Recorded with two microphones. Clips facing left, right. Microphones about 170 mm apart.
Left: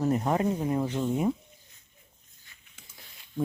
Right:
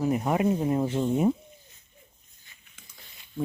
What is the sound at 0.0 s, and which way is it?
Speech, 10° right (ahead or behind).